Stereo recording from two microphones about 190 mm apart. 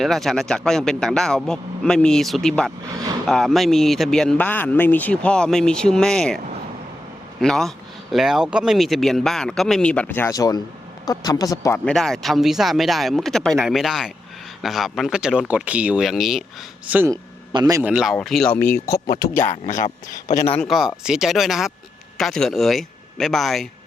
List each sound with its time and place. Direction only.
0.0 s speech: centre (ahead or behind)
7.4 s speech: centre (ahead or behind); by 11.8 s 15° left (ahead or behind)
11.9 s a man's voice: centre (ahead or behind); by 17.9 s 15° right (ahead or behind)
17.9 s speech: centre (ahead or behind); by 19.4 s 20° left (ahead or behind)
19.4 s speech: 40° left (ahead or behind)
20.6 s speech: centre (ahead or behind)